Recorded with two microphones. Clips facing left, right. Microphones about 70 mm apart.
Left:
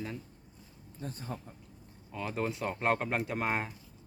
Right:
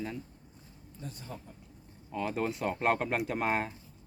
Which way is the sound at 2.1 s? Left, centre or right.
Centre.